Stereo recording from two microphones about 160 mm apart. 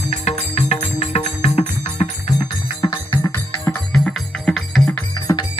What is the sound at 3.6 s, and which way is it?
Music, 5° left (ahead or behind).